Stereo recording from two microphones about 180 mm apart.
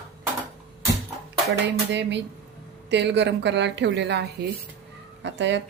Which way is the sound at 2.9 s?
75° right (ahead or behind).